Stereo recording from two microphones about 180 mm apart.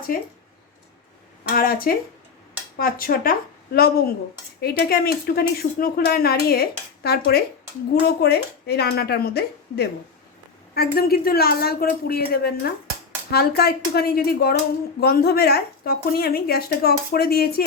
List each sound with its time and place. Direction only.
0.1 s speech: 50° left (ahead or behind)
1.5 s speech: 55° left (ahead or behind)